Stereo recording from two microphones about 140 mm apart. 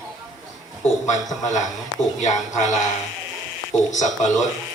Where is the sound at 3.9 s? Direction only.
60° left (ahead or behind).